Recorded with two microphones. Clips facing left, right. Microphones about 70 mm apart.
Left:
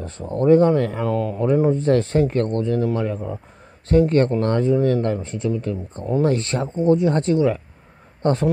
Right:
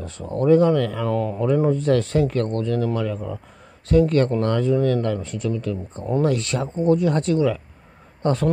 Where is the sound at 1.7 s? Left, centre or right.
Left.